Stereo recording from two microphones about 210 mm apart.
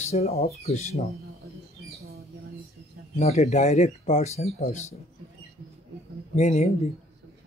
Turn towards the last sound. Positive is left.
turn(degrees=35)  # may be behind; listen again after turning